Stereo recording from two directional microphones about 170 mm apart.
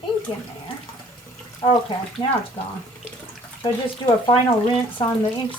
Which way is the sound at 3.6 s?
30° left (ahead or behind).